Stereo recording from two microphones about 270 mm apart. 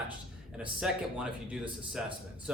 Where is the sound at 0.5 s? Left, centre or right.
Centre.